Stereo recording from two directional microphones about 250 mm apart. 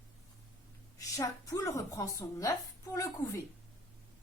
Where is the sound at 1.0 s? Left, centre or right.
Centre.